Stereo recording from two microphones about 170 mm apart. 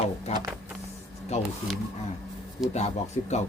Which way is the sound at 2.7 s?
40° left (ahead or behind).